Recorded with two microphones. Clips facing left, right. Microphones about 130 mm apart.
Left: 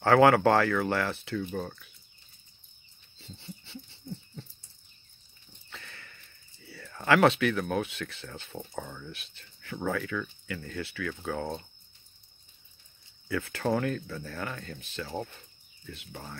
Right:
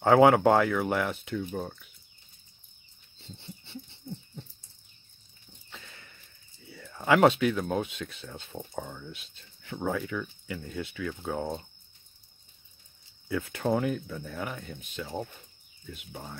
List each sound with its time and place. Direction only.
0.0 s speech: 20° right (ahead or behind)
3.2 s dog: 25° right (ahead or behind)
5.7 s a sound: 20° right (ahead or behind)
7.1 s speech: 20° right (ahead or behind)
13.3 s speech: 20° right (ahead or behind)